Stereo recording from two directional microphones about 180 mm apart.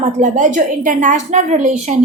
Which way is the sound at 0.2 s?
45° right (ahead or behind).